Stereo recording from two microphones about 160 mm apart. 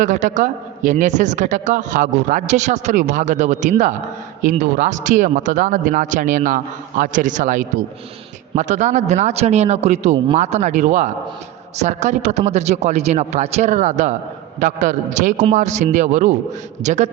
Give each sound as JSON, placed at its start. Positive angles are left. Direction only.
{"t": 0.0, "sound": "a man's voice", "side_deg": -50}